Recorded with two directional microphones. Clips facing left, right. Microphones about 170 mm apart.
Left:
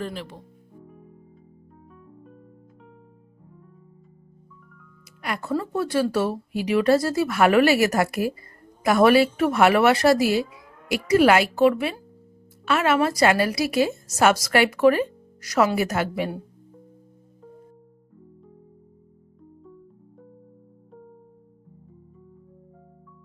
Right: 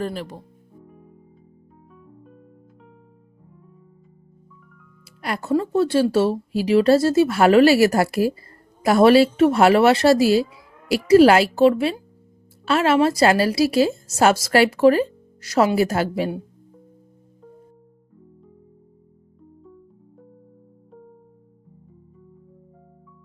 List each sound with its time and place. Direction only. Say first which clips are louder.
0.0 s speech: right 4 dB; 40° right (ahead or behind)
0.9 s music: even; centre (ahead or behind)
5.2 s a woman's voice: right 5 dB; 30° right (ahead or behind)